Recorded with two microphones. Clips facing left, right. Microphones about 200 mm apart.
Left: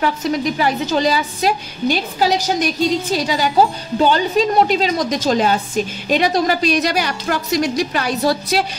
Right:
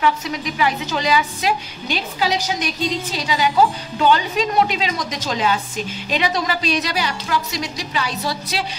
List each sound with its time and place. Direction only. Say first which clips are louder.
0.0 s a woman's voice: left 3 dB; 40° left (ahead or behind)